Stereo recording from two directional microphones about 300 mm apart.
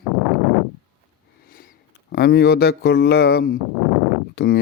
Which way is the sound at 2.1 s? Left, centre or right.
Left.